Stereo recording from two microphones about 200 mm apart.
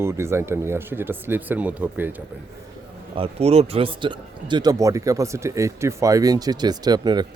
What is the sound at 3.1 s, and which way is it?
Speech, 30° right (ahead or behind).